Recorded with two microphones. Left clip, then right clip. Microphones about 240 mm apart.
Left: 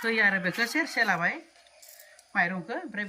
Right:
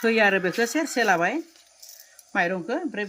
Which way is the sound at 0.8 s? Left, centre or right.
Right.